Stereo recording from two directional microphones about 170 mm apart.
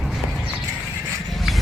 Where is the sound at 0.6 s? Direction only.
15° right (ahead or behind).